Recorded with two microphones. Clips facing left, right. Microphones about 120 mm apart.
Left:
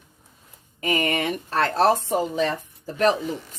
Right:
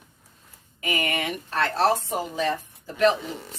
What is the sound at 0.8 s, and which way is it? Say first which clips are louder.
Speech: left 4 dB; 35° left (ahead or behind).